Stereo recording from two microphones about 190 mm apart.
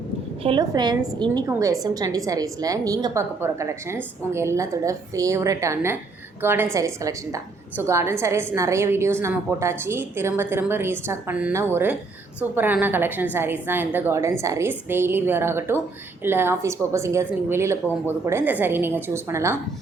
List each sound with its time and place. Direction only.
0.4 s a woman's voice: 20° right (ahead or behind)